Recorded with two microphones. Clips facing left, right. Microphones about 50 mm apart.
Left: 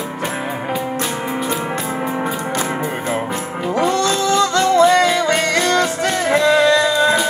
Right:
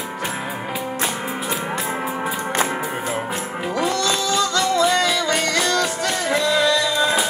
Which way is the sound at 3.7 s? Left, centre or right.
Left.